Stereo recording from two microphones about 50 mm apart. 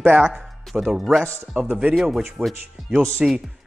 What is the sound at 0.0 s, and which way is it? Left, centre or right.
Speech, right.